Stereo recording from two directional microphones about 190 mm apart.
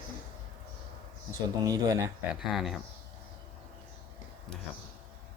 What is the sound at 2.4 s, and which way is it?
Speech, centre (ahead or behind).